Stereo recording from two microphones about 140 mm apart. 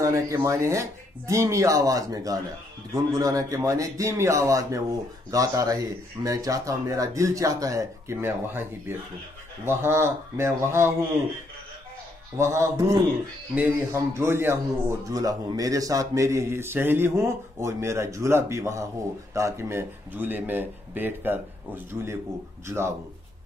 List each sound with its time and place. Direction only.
0.0 s a man's voice: 20° right (ahead or behind)
12.4 s a man's voice: 20° right (ahead or behind)